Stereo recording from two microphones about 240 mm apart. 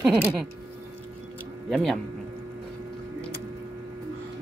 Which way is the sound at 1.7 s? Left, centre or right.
Centre.